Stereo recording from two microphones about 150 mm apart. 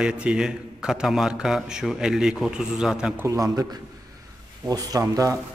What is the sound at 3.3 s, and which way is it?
Speech, 20° right (ahead or behind).